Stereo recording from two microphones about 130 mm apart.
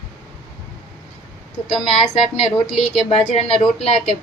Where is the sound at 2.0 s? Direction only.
50° left (ahead or behind).